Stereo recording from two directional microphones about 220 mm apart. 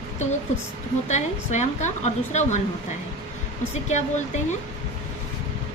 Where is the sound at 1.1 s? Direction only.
30° left (ahead or behind).